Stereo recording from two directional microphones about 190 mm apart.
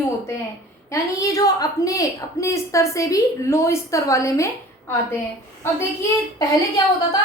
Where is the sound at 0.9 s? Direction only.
15° left (ahead or behind).